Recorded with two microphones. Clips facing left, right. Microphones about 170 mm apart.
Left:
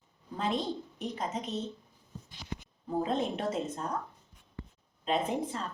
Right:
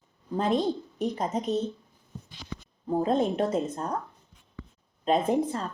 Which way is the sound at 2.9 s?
40° right (ahead or behind).